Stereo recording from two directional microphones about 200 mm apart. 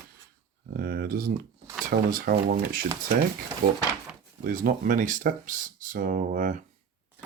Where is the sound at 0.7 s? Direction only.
50° right (ahead or behind).